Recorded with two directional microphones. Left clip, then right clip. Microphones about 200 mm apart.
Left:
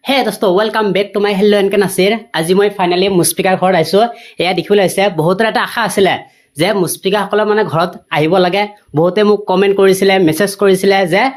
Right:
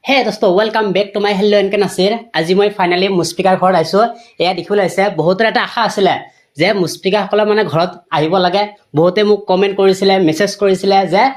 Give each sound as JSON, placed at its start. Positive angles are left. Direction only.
{"t": 0.1, "sound": "a woman's voice", "side_deg": 15}
{"t": 3.2, "sound": "a woman's voice", "side_deg": 35}
{"t": 5.7, "sound": "speech", "side_deg": 40}
{"t": 6.6, "sound": "speech", "side_deg": 15}
{"t": 8.1, "sound": "speech", "side_deg": 45}
{"t": 9.1, "sound": "speech", "side_deg": 25}
{"t": 10.2, "sound": "a woman's voice", "side_deg": 25}
{"t": 10.7, "sound": "speech", "side_deg": 40}